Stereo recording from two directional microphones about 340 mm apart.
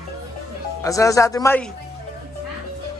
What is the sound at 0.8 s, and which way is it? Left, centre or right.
Speech, centre.